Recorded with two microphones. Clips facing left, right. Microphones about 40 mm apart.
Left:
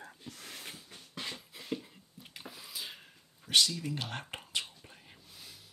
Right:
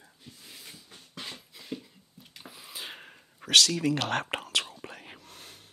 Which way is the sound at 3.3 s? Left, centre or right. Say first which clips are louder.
Right 6 dB; right.